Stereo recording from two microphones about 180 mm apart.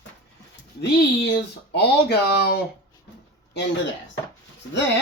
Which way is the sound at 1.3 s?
65° left (ahead or behind).